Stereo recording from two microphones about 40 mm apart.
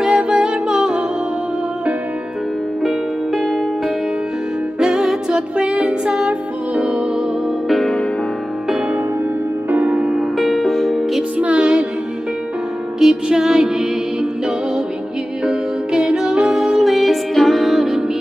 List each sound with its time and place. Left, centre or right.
0.1 s music: right
2.8 s music: centre
4.7 s music: centre
7.8 s music: left
9.8 s music: right
10.3 s music: centre
11.3 s music: right
13.0 s music: centre
15.4 s music: centre
16.5 s music: centre